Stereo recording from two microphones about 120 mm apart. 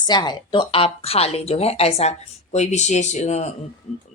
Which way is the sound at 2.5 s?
75° left (ahead or behind).